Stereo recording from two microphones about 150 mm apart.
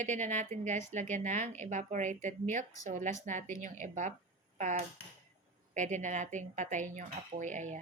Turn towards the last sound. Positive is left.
turn(degrees=-55)  # may be behind; listen again after turning